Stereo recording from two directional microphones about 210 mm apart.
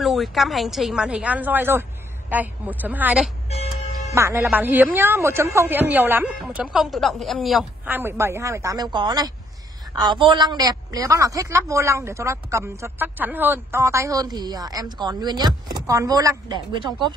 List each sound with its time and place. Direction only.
0.0 s speech: centre (ahead or behind); by 17.1 s 20° right (ahead or behind)